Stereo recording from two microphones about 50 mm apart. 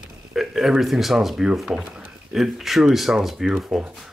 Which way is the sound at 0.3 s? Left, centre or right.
Centre.